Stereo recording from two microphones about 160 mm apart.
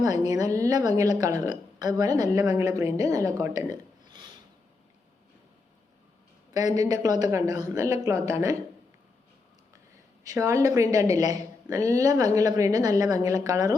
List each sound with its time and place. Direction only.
0.0 s a woman's voice: 20° right (ahead or behind)
6.5 s a woman's voice: 25° right (ahead or behind)
10.2 s a woman's voice: 20° right (ahead or behind)